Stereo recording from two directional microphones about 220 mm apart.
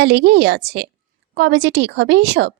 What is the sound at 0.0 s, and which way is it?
A woman's voice, 50° right (ahead or behind).